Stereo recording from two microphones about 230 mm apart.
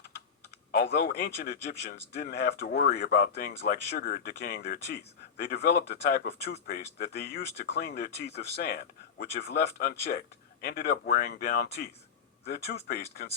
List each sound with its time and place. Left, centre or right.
0.7 s speech: left